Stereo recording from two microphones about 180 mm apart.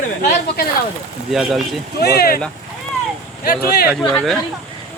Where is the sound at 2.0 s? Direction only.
60° left (ahead or behind).